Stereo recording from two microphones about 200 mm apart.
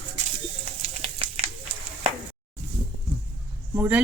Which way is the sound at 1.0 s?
25° right (ahead or behind).